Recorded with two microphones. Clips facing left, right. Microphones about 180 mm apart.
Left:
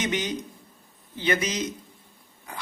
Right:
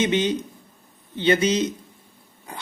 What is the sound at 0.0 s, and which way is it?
Speech, 25° right (ahead or behind).